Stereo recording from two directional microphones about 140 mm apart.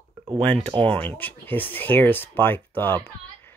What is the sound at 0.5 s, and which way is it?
Speech, 45° right (ahead or behind).